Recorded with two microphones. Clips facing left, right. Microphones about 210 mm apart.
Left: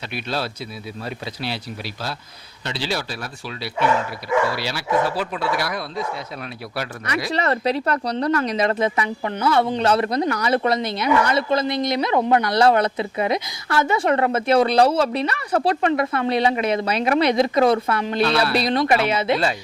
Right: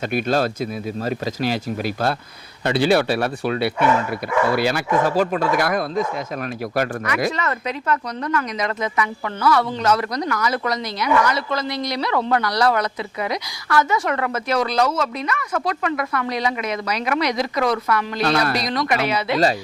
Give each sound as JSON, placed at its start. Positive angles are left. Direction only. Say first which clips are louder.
{"t": 0.1, "sound": "speech", "louder": "right 6 dB", "side_deg": -45}
{"t": 7.3, "sound": "speech", "louder": "left 3 dB", "side_deg": 35}